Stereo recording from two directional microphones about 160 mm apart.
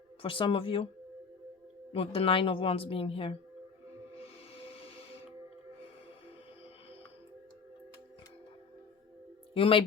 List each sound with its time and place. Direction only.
0.2 s speech: 30° left (ahead or behind)
1.9 s speech: 35° left (ahead or behind)
4.2 s music: 35° left (ahead or behind)
9.6 s speech: 35° left (ahead or behind)